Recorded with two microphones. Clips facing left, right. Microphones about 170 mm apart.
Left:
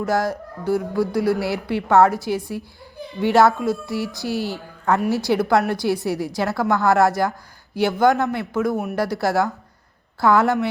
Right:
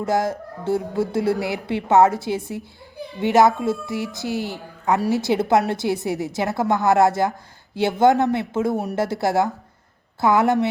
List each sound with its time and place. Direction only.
0.0 s speech: 20° right (ahead or behind)